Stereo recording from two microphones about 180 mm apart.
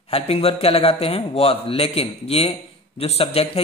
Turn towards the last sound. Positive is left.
turn(degrees=35)  # may be behind; listen again after turning